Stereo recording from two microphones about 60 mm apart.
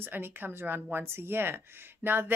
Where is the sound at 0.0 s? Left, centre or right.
Right.